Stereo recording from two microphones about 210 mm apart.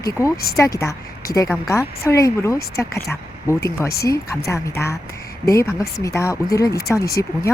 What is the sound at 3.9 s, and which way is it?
Speech, 50° left (ahead or behind).